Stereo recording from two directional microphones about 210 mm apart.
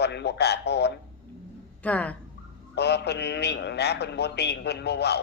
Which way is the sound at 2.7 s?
50° left (ahead or behind).